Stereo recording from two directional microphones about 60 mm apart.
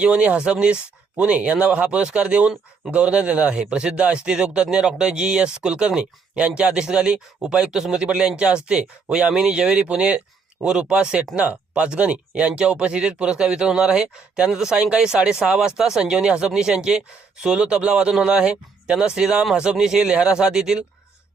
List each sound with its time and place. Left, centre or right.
0.0 s a man's voice: right